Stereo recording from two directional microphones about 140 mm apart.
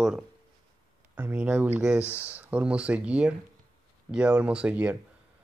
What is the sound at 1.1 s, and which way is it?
Speech, 15° right (ahead or behind).